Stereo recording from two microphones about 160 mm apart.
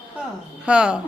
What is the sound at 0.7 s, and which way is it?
Speech, 5° right (ahead or behind).